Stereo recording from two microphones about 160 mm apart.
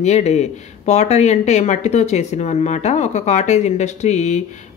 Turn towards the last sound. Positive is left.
turn(degrees=45)  # may be behind; listen again after turning